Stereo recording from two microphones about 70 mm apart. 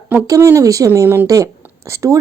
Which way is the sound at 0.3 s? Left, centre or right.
Right.